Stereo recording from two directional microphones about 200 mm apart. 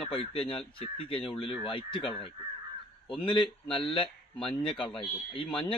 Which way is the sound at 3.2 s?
25° left (ahead or behind).